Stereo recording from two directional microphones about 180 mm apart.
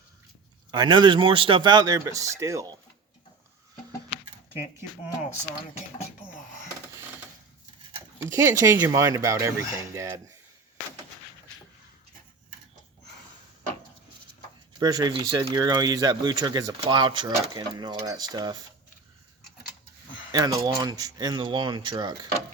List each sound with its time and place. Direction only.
0.7 s speech: 25° right (ahead or behind)
8.2 s speech: 15° right (ahead or behind)
14.8 s speech: 20° right (ahead or behind)
20.3 s speech: 20° right (ahead or behind)